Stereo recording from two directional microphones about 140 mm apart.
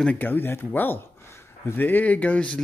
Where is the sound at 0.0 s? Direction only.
10° left (ahead or behind).